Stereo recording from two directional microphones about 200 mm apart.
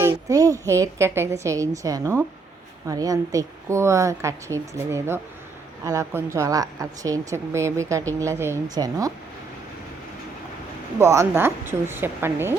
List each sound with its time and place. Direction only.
0.0 s a woman's voice: 15° right (ahead or behind)
11.0 s a woman's voice: 15° right (ahead or behind)